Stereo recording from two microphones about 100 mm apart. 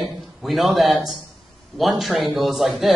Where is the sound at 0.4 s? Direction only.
Centre (ahead or behind).